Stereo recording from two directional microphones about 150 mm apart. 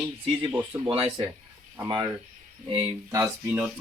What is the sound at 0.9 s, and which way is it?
Speech, 40° right (ahead or behind).